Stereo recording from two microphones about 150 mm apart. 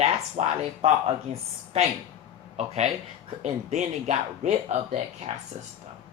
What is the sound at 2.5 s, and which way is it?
Speech, 45° right (ahead or behind).